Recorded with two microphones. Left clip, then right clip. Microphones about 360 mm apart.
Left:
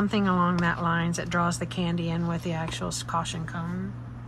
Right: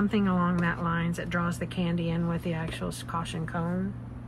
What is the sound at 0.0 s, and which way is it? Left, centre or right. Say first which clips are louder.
Speech: left 3 dB; centre.